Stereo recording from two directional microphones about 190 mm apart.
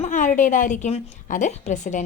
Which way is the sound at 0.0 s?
45° left (ahead or behind).